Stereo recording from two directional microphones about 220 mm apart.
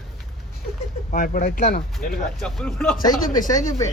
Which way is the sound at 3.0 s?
15° left (ahead or behind).